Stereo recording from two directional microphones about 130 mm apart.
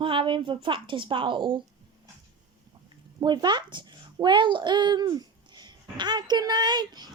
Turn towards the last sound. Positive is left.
turn(degrees=-30)  # may be behind; listen again after turning